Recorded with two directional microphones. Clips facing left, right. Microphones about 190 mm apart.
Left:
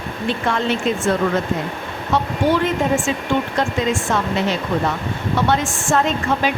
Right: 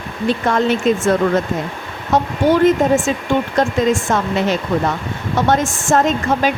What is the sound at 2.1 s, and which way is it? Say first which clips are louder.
Speech: right 4 dB; 45° right (ahead or behind).